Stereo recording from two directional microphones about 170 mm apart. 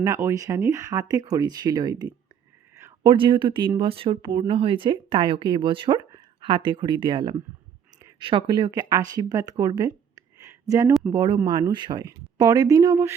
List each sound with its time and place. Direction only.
0.0 s speech: 15° right (ahead or behind)